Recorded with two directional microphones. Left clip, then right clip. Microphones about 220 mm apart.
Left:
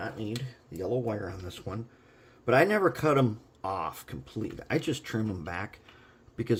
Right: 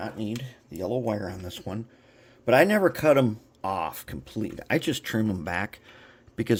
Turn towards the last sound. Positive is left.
turn(degrees=-35)  # may be behind; listen again after turning